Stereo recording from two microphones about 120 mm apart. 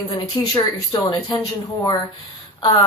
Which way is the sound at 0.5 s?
50° left (ahead or behind).